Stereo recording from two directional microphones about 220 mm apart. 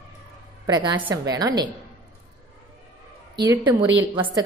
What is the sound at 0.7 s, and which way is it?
A woman's voice, 20° right (ahead or behind).